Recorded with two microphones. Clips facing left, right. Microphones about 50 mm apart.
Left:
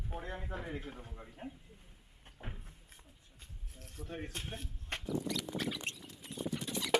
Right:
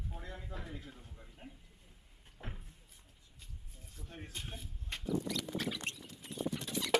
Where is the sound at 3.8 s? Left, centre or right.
Left.